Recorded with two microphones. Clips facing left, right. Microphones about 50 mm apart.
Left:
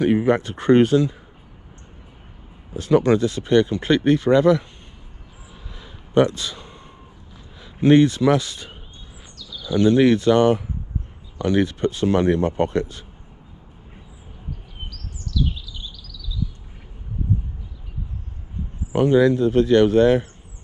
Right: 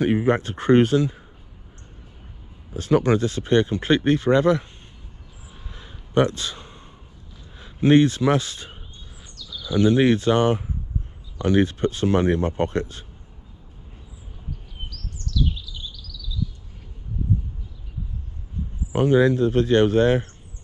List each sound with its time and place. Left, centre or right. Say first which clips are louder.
0.0 s speech: left 2 dB; right
2.7 s speech: left 2 dB; right
6.1 s speech: left 3 dB; right
7.5 s a sound: left 2 dB; right
8.3 s speech: left 2 dB; right
9.3 s bird: even; centre
9.7 s speech: left 2 dB; centre
10.0 s speech: left 3 dB; right
11.5 s speech: even; right
12.4 s speech: left 3 dB; left
12.7 s speech: left 3 dB; right
14.9 s chirp: even; centre
19.0 s speech: left 1 dB; right